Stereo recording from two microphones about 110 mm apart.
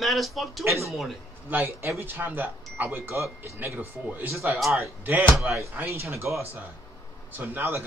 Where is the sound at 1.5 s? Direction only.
20° right (ahead or behind).